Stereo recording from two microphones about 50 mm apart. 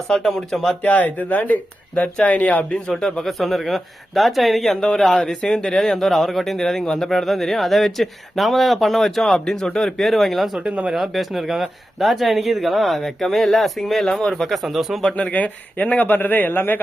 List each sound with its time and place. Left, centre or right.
0.1 s speech: centre
0.9 s speech: left
2.9 s speech: centre
5.8 s speech: centre
10.0 s speech: centre
10.7 s speech: right
10.9 s speech: centre
15.2 s speech: left